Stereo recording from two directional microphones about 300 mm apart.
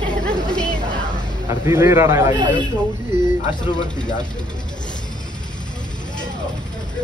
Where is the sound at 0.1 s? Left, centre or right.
Centre.